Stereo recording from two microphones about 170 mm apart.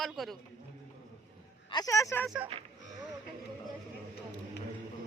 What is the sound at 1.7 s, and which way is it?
Speech, 20° left (ahead or behind).